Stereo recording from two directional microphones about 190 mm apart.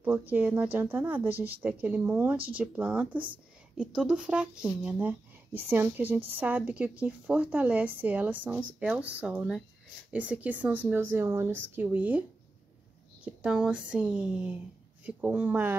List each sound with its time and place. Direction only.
0.0 s a woman's voice: 10° right (ahead or behind)